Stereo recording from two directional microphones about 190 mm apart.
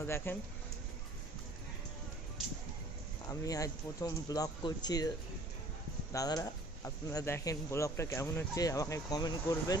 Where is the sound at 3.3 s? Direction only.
20° left (ahead or behind).